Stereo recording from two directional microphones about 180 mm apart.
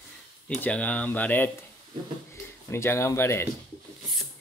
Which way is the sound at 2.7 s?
15° left (ahead or behind).